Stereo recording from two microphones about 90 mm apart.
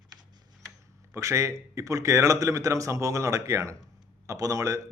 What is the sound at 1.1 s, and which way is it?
Speech, 35° right (ahead or behind).